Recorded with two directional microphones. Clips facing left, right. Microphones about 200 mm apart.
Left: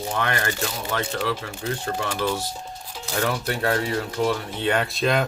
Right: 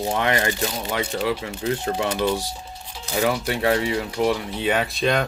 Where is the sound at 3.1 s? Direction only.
10° right (ahead or behind).